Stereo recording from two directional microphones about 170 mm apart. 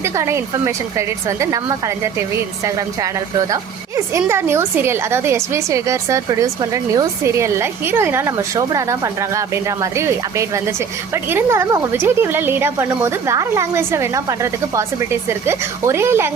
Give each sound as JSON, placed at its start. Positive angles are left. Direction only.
{"t": 0.0, "sound": "a woman's voice", "side_deg": -15}
{"t": 2.6, "sound": "a woman's voice", "side_deg": -20}